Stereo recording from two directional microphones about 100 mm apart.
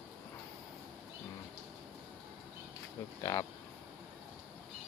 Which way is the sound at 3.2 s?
30° left (ahead or behind).